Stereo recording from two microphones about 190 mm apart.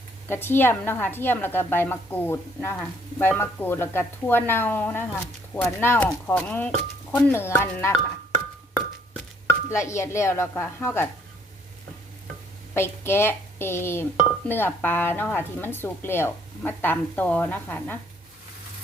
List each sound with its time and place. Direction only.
0.3 s speech: 10° left (ahead or behind)
9.6 s speech: 15° left (ahead or behind)
12.7 s speech: 10° left (ahead or behind)